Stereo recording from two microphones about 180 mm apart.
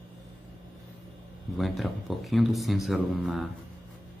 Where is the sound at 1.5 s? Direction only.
Centre (ahead or behind).